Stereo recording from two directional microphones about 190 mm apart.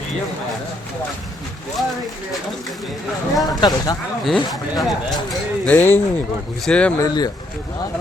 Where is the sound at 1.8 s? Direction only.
Centre (ahead or behind).